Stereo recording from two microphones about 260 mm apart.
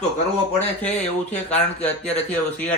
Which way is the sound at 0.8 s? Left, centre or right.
Left.